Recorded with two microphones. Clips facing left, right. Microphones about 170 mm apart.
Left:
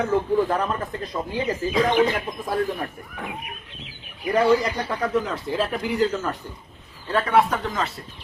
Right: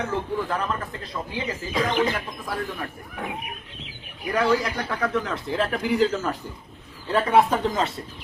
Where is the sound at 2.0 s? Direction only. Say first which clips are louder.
Left 3 dB; 15° left (ahead or behind).